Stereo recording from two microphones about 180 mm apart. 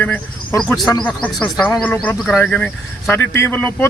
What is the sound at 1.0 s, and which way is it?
Speech, 5° left (ahead or behind).